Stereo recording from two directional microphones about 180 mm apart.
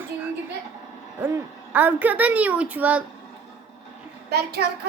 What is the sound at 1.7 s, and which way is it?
A woman's voice, 10° right (ahead or behind).